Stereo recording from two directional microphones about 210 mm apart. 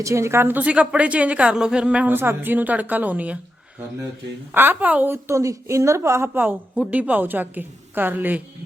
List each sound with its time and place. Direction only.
0.0 s a woman's voice: 15° right (ahead or behind)
4.5 s a woman's voice: 10° right (ahead or behind)